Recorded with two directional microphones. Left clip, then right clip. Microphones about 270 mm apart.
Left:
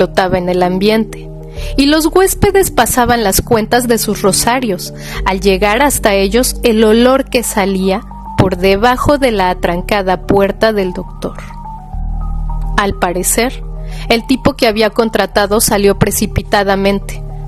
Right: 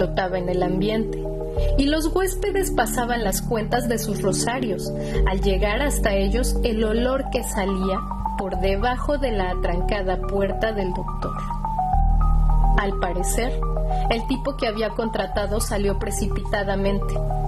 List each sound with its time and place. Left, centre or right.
0.0 s a woman's voice: left
12.7 s a woman's voice: left